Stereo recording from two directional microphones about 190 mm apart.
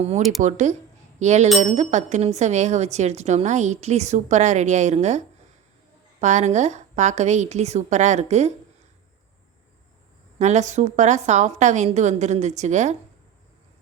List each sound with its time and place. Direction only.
0.4 s speech: 40° right (ahead or behind)
10.3 s speech: 35° right (ahead or behind)